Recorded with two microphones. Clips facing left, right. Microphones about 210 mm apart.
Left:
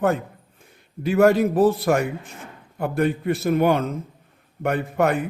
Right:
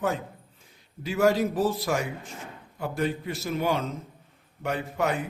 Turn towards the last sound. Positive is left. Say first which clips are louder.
# left 6 dB
turn(degrees=60)  # may be behind; listen again after turning